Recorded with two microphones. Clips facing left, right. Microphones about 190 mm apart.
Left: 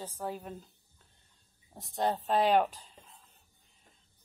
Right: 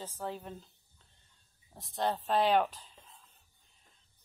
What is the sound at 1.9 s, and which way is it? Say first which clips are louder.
Speech: left 2 dB; 15° left (ahead or behind).